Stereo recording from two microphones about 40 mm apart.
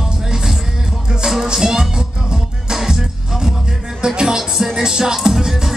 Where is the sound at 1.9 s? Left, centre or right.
Centre.